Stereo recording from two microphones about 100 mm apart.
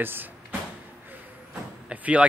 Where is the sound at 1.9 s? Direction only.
15° right (ahead or behind).